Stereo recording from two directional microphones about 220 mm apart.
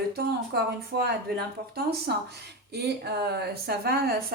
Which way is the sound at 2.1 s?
45° right (ahead or behind).